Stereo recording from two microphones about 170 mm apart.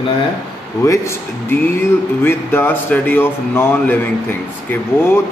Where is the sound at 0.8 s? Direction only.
15° left (ahead or behind).